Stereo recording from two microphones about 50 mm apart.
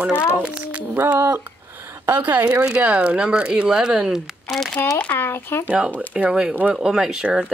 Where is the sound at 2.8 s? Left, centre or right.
Right.